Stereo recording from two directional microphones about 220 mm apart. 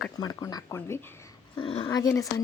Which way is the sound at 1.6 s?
25° left (ahead or behind).